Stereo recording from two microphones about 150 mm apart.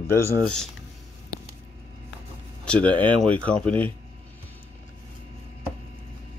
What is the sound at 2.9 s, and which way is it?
Speech, 30° right (ahead or behind).